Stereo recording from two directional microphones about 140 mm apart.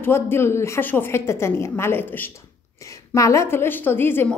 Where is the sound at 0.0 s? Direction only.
15° left (ahead or behind).